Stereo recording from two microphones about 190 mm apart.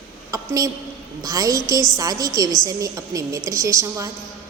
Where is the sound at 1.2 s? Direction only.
20° right (ahead or behind).